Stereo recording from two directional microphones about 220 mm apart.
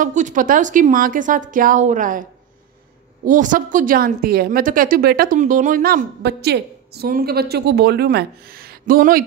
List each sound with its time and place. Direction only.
0.0 s a woman's voice: 35° right (ahead or behind)
3.3 s a woman's voice: 35° right (ahead or behind)